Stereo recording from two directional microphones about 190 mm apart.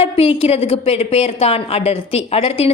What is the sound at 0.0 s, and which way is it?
A woman's voice, 30° left (ahead or behind).